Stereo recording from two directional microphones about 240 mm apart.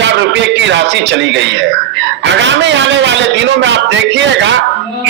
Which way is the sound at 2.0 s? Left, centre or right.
Right.